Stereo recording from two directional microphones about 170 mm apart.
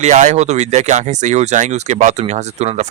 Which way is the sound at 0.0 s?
45° right (ahead or behind).